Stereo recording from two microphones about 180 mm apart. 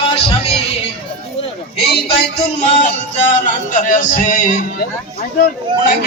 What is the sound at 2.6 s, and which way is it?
A man's voice, 40° left (ahead or behind).